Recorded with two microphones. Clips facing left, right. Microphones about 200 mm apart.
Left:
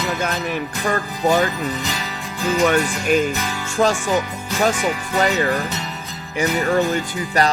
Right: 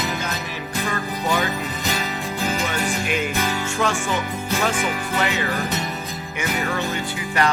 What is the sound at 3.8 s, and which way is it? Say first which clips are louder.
Speech: left 7 dB; 35° left (ahead or behind).